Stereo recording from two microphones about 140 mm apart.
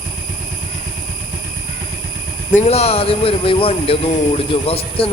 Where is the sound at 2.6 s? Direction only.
50° left (ahead or behind).